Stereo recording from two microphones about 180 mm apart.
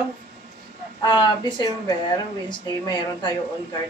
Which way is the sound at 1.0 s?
25° left (ahead or behind).